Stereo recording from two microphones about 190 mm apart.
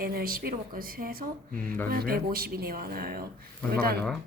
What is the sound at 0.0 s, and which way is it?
Speech, 50° right (ahead or behind).